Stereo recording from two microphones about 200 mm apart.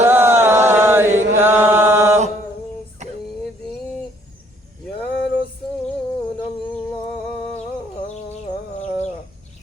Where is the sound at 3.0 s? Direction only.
35° right (ahead or behind).